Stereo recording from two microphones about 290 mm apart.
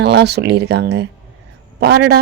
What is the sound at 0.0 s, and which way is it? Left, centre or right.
A woman's voice, right.